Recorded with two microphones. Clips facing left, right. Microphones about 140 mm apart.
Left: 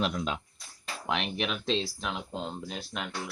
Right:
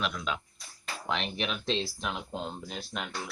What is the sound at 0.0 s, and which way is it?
Speech, 35° left (ahead or behind).